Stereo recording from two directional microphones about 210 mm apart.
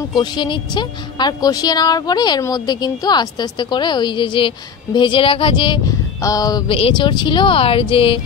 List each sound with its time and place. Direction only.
0.2 s a woman's voice: 20° left (ahead or behind)